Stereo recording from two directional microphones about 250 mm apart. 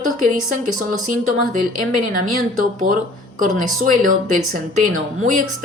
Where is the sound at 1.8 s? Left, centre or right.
Right.